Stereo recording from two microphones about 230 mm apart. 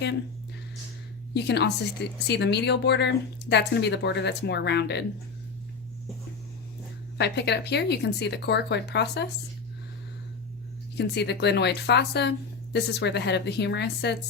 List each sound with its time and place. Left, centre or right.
1.3 s speech: left
7.2 s speech: left
10.9 s speech: left